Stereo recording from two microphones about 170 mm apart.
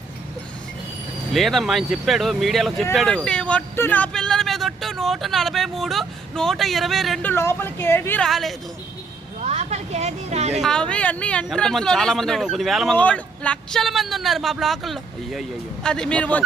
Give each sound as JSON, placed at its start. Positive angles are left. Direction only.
{"t": 1.3, "sound": "a man's voice", "side_deg": 0}
{"t": 7.3, "sound": "a woman's voice", "side_deg": 15}
{"t": 8.3, "sound": "a man's voice", "side_deg": 0}
{"t": 9.4, "sound": "speech", "side_deg": -40}
{"t": 10.5, "sound": "a man's voice", "side_deg": 0}